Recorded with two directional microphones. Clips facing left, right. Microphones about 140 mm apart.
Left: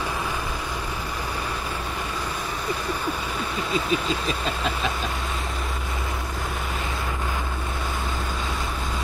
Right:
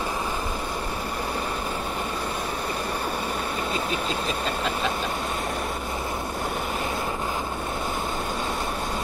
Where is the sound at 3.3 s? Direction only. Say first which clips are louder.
Left 1 dB; 45° right (ahead or behind).